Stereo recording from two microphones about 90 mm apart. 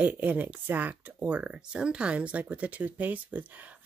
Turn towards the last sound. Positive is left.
turn(degrees=-20)  # may be behind; listen again after turning